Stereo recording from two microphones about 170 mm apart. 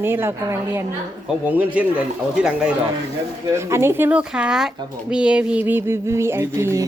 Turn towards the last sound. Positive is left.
turn(degrees=-15)  # may be behind; listen again after turning